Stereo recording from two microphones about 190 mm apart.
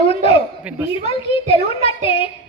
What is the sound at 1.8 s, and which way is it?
Speech, 30° left (ahead or behind).